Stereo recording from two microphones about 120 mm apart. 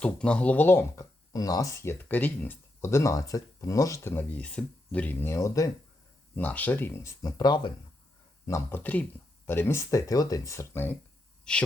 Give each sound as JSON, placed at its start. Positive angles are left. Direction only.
{"t": 0.0, "sound": "speech", "side_deg": 10}
{"t": 1.3, "sound": "speech", "side_deg": 30}
{"t": 6.3, "sound": "speech", "side_deg": 15}
{"t": 8.4, "sound": "speech", "side_deg": 25}
{"t": 8.8, "sound": "speech", "side_deg": 15}
{"t": 11.5, "sound": "speech", "side_deg": 5}